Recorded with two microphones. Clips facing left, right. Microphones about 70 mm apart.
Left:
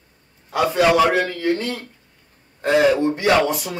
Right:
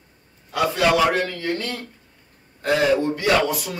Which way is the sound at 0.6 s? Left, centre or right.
Centre.